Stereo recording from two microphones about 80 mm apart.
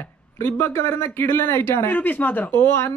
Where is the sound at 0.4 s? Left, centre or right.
Left.